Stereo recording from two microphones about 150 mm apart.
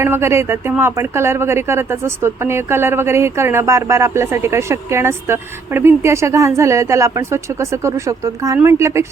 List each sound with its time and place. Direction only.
0.0 s speech: 15° right (ahead or behind)